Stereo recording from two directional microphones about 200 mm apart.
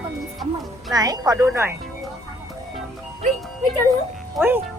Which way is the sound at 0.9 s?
20° right (ahead or behind).